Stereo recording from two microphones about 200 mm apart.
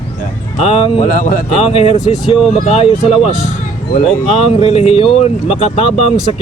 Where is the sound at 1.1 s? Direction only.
45° left (ahead or behind).